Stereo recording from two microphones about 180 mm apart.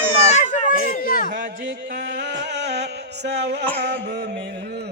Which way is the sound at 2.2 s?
70° right (ahead or behind).